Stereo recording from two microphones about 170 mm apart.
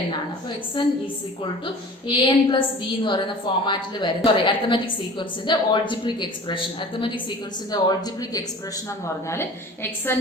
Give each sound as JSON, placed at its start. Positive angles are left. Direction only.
{"t": 0.8, "sound": "a woman's voice", "side_deg": 25}